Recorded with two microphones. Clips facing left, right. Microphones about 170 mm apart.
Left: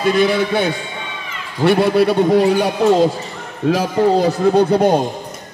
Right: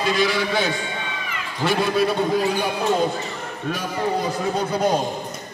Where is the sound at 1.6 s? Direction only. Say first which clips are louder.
Left 7 dB; 65° left (ahead or behind).